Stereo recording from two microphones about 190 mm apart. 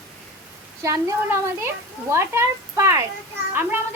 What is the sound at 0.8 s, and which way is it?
A child's voice, 15° right (ahead or behind).